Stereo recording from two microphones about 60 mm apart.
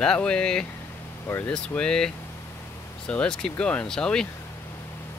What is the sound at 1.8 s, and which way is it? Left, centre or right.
Speech, centre.